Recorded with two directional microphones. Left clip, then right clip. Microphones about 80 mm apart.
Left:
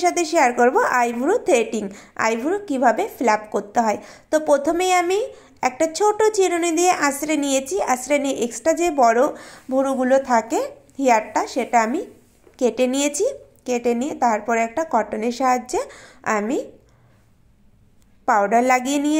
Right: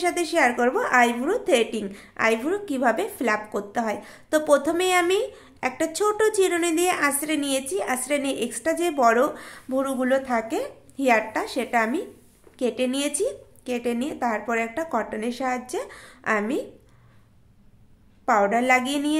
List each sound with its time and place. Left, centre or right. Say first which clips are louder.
0.0 s a woman's voice: left 4 dB; left
2.4 s a woman's voice: left 5 dB; centre
4.3 s a woman's voice: left 2 dB; centre; by 8.9 s left
8.9 s a woman's voice: left 2 dB; centre
10.3 s a woman's voice: left 6 dB; left
11.0 s a woman's voice: left 4 dB; centre
12.5 s a woman's voice: left 6 dB; left; by 15.0 s centre
15.0 s a woman's voice: left 7 dB; left
18.2 s a woman's voice: left 4 dB; left